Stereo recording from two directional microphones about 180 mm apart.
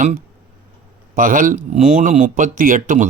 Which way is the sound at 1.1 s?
50° right (ahead or behind).